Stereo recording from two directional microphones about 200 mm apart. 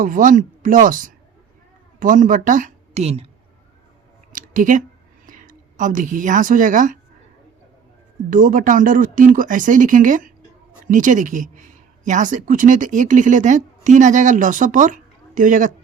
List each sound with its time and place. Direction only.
0.0 s a woman's voice: 40° right (ahead or behind)
4.3 s a woman's voice: 40° right (ahead or behind)
8.3 s speech: 40° right (ahead or behind)